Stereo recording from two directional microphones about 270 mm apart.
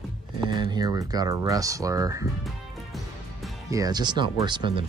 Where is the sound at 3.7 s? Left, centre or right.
Centre.